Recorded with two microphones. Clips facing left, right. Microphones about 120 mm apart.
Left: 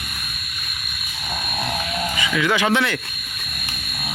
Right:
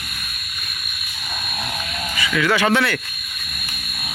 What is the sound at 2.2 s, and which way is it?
Speech, 15° left (ahead or behind).